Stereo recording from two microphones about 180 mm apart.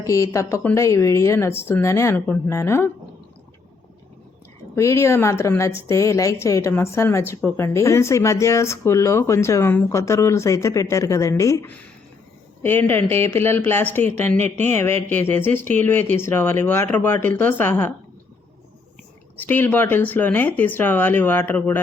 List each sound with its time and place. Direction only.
0.0 s a woman's voice: 15° left (ahead or behind)
4.7 s a woman's voice: 15° left (ahead or behind)
19.4 s a woman's voice: 10° left (ahead or behind)